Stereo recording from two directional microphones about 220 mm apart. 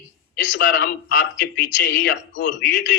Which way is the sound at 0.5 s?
55° left (ahead or behind).